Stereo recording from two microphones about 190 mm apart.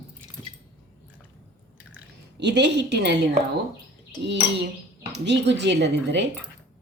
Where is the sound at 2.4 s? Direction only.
65° right (ahead or behind).